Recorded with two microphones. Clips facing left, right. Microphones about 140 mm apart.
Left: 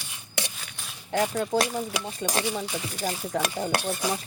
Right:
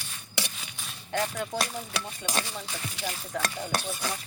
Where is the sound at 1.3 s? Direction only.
30° left (ahead or behind).